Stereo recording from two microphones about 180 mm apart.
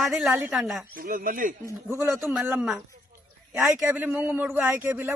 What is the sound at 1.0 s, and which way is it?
Speech, 50° right (ahead or behind).